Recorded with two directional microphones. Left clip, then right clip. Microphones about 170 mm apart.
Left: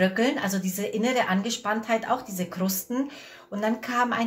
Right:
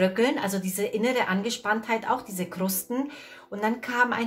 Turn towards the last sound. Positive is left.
turn(degrees=-20)  # may be behind; listen again after turning